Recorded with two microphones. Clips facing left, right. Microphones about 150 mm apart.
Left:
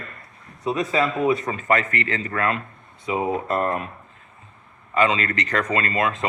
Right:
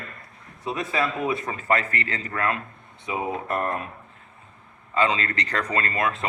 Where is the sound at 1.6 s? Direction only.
30° right (ahead or behind).